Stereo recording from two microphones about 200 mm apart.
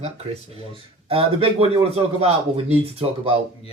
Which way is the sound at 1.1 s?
30° right (ahead or behind).